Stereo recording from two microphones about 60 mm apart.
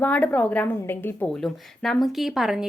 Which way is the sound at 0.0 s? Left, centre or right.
Left.